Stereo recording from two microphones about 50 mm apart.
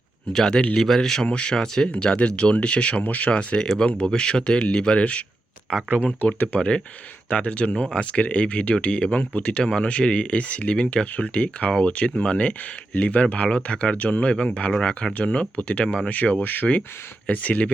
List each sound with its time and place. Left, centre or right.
0.3 s speech: centre
1.9 s speech: left
3.3 s speech: centre
6.0 s speech: left
6.6 s speech: centre
14.3 s speech: centre
15.1 s speech: left
17.2 s speech: left